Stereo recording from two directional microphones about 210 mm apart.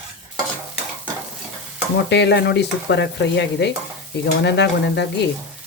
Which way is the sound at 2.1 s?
55° left (ahead or behind).